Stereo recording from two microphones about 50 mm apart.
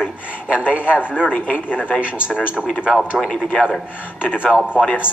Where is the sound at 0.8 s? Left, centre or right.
Right.